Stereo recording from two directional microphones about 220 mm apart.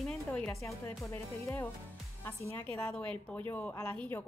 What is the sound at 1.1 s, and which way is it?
A woman's voice, 10° left (ahead or behind).